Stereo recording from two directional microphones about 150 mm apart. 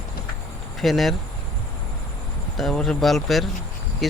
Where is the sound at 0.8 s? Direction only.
Centre (ahead or behind).